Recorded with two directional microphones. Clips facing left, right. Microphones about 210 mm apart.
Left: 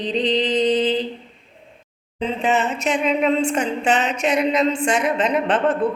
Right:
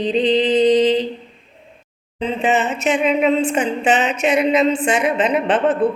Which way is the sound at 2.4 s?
5° right (ahead or behind).